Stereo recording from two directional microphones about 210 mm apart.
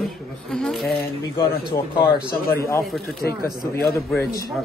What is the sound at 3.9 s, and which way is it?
Speech, 15° left (ahead or behind).